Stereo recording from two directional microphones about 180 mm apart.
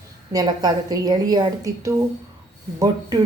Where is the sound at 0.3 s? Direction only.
20° right (ahead or behind).